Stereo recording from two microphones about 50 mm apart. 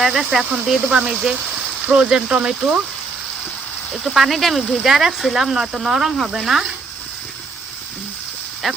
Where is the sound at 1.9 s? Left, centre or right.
Right.